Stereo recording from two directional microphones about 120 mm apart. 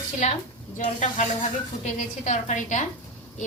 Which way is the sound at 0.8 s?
90° left.